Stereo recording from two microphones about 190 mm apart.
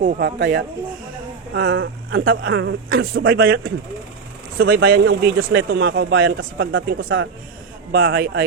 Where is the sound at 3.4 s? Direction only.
80° right.